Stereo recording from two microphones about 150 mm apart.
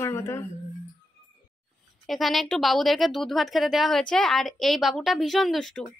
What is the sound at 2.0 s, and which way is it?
A woman's voice, centre (ahead or behind).